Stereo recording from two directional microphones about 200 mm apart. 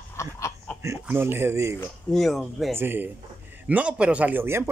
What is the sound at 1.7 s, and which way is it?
Speech, centre (ahead or behind).